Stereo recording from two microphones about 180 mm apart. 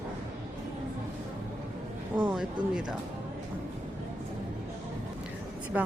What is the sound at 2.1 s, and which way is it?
Speech, 5° right (ahead or behind).